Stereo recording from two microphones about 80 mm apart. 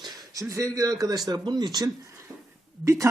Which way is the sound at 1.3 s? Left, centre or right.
Right.